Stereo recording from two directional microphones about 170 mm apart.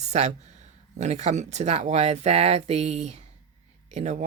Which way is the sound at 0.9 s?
40° right (ahead or behind).